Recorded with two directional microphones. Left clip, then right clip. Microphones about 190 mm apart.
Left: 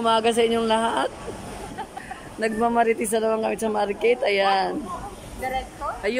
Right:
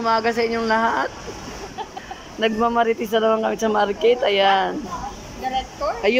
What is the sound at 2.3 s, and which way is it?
Speech, 5° left (ahead or behind).